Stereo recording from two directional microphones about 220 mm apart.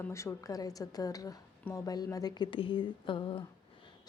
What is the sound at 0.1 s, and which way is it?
A woman's voice, 10° left (ahead or behind).